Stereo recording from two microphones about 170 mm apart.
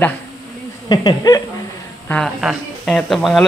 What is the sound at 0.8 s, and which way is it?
Speech, 25° left (ahead or behind).